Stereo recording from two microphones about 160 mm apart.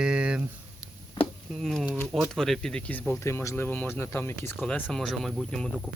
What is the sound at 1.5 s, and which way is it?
Speech, centre (ahead or behind).